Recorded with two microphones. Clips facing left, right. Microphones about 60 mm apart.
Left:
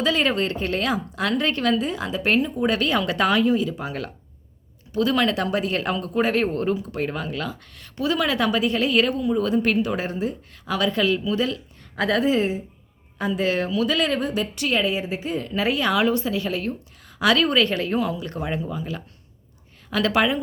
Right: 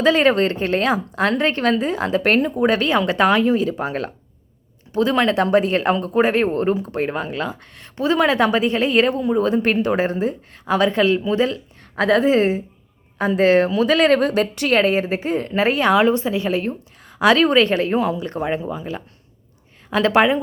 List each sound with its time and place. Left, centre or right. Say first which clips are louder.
0.0 s speech: right 6 dB; right